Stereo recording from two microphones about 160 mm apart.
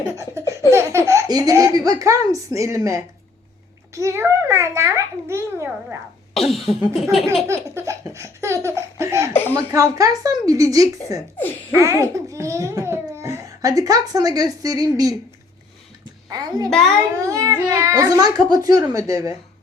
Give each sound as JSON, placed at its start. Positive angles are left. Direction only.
{"t": 0.2, "sound": "a sound", "side_deg": -20}
{"t": 0.7, "sound": "a child's voice", "side_deg": -15}
{"t": 6.3, "sound": "cough", "side_deg": 0}
{"t": 7.4, "sound": "a child's voice", "side_deg": -15}
{"t": 9.3, "sound": "speech", "side_deg": 15}
{"t": 9.7, "sound": "a child's voice", "side_deg": -20}
{"t": 16.3, "sound": "a child's voice", "side_deg": -25}
{"t": 16.6, "sound": "cough", "side_deg": 0}
{"t": 17.2, "sound": "a child's voice", "side_deg": -20}